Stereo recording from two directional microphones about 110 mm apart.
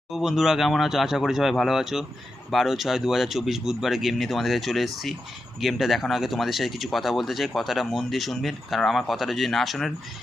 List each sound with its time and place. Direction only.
0.1 s speech: 5° right (ahead or behind)